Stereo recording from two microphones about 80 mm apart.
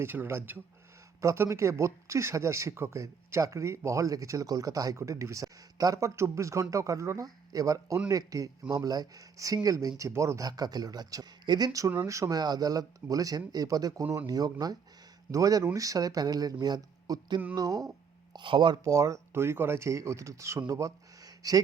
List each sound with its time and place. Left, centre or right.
0.0 s speech: right
6.1 s speech: right
12.4 s speech: right
17.5 s speech: right
18.3 s speech: right
18.9 s speech: right
20.7 s a sound: right